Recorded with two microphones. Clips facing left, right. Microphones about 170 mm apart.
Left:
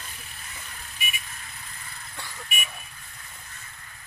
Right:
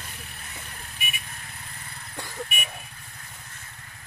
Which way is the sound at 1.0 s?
60° right (ahead or behind).